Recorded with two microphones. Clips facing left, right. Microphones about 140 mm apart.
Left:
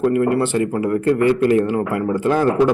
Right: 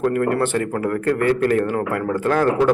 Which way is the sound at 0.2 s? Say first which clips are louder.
Left 2 dB; 10° left (ahead or behind).